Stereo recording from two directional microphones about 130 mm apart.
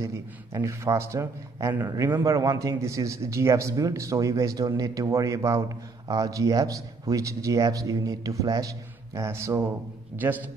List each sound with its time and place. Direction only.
0.0 s a man's voice: 25° right (ahead or behind)